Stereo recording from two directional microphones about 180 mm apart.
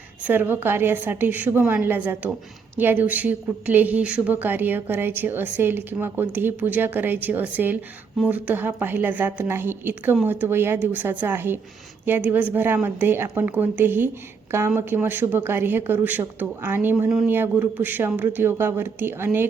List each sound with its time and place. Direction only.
0.3 s a woman's voice: 10° right (ahead or behind)